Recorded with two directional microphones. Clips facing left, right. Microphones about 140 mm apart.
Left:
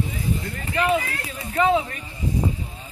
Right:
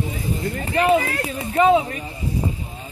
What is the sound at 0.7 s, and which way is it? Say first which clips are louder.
Speech: right 4 dB; 40° right (ahead or behind).